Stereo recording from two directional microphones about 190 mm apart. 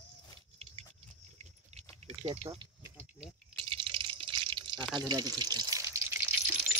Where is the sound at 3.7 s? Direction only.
25° right (ahead or behind); by 6.7 s 10° right (ahead or behind).